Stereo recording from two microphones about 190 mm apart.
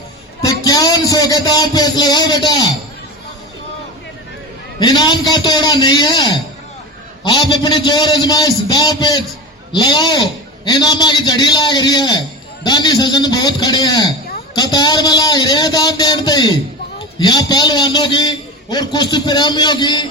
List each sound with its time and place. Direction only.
0.6 s speech: 20° left (ahead or behind)
4.8 s a man's voice: 25° left (ahead or behind)
7.3 s a man's voice: 25° left (ahead or behind)